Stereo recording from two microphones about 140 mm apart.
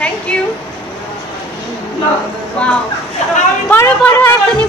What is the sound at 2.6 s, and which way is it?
Speech, 10° left (ahead or behind).